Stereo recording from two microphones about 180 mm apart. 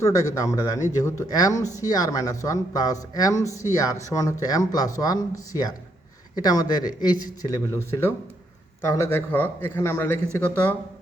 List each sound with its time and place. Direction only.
0.0 s speech: 20° left (ahead or behind)